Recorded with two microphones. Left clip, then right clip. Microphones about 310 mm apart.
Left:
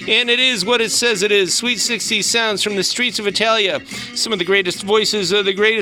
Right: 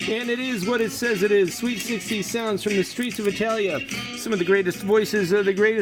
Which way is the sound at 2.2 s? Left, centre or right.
Left.